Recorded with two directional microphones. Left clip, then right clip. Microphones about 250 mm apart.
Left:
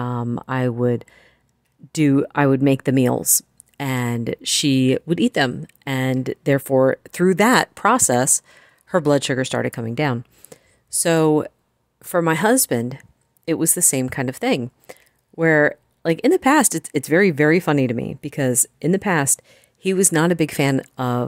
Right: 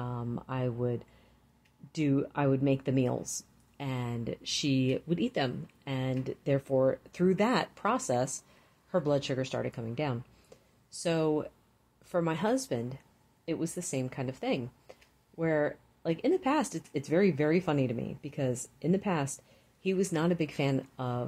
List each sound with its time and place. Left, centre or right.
0.0 s speech: left